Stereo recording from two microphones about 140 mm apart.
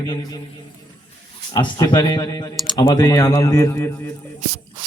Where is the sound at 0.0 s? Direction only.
25° left (ahead or behind).